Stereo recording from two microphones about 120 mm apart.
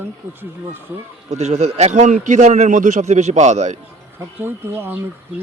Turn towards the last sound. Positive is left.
turn(degrees=-20)  # may be behind; listen again after turning